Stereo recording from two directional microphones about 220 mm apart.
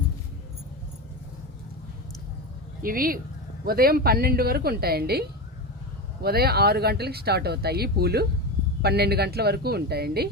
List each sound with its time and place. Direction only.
2.8 s speech: 40° right (ahead or behind)